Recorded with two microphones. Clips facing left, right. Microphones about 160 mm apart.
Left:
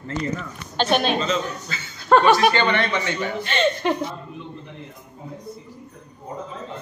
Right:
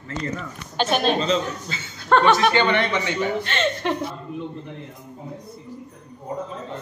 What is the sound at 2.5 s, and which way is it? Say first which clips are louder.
Speech: right 1 dB; 15° right (ahead or behind).